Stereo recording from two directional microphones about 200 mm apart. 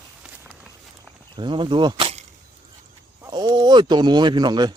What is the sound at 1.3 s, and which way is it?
Speech, 25° right (ahead or behind).